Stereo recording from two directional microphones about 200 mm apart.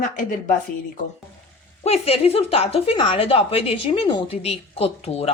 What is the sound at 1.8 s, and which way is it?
Speech, 30° left (ahead or behind).